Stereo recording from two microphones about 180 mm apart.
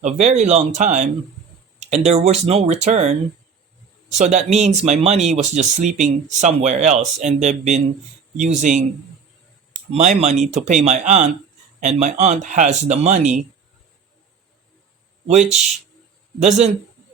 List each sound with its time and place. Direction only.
0.0 s speech: 40° right (ahead or behind)
9.9 s speech: 40° right (ahead or behind)
15.3 s speech: 40° right (ahead or behind)